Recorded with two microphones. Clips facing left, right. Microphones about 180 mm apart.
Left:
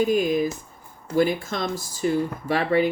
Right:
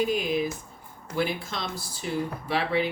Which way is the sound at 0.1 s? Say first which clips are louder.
Left 5 dB; 45° left (ahead or behind).